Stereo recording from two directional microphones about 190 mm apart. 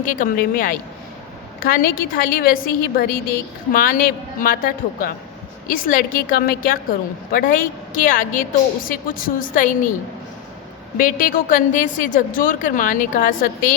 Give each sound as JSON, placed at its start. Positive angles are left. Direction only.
{"t": 0.0, "sound": "a woman's voice", "side_deg": 45}
{"t": 10.9, "sound": "a woman's voice", "side_deg": 45}